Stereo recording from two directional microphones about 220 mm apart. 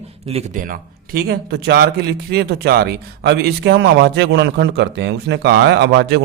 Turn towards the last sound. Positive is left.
turn(degrees=-50)  # may be behind; listen again after turning